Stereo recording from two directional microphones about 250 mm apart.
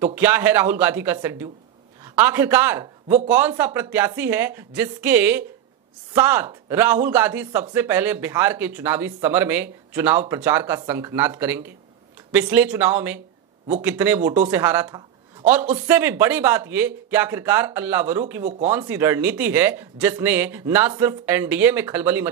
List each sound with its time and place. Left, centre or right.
0.0 s a man's voice: centre
18.4 s speech: right
18.7 s speech: centre